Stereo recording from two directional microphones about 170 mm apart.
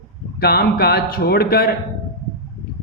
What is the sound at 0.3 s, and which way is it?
Speech, 65° left (ahead or behind).